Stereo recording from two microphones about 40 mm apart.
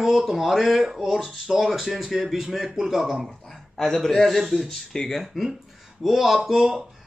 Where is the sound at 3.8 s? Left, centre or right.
Centre.